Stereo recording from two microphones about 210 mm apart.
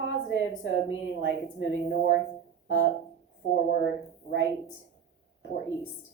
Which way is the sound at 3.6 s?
55° left (ahead or behind).